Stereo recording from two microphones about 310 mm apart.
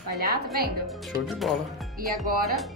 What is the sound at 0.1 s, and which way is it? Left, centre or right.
Speech, right.